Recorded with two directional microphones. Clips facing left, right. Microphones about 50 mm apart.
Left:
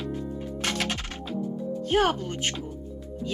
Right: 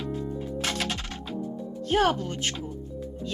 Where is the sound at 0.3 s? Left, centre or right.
Left.